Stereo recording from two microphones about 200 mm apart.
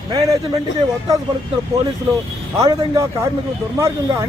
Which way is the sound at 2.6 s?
20° right (ahead or behind).